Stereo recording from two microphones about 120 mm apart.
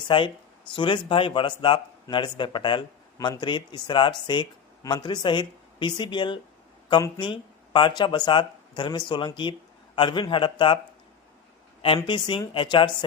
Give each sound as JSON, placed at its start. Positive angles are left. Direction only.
{"t": 0.1, "sound": "speech", "side_deg": 45}
{"t": 12.0, "sound": "speech", "side_deg": 40}